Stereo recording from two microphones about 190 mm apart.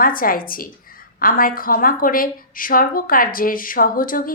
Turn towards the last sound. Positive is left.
turn(degrees=45)  # may be behind; listen again after turning